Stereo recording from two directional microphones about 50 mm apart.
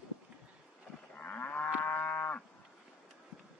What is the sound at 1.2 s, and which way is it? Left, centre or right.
Moo, left.